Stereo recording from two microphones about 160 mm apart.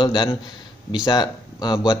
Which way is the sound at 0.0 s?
30° left (ahead or behind).